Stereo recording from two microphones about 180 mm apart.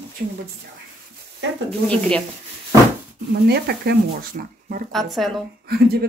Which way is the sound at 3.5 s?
65° right (ahead or behind).